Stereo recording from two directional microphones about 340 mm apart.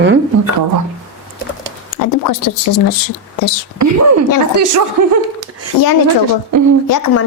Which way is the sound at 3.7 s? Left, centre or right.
Right.